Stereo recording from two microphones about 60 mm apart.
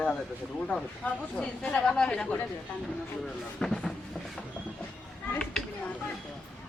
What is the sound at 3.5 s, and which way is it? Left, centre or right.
Speech, centre.